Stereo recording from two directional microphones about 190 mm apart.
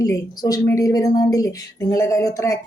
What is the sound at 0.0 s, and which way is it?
A woman's voice, 20° left (ahead or behind).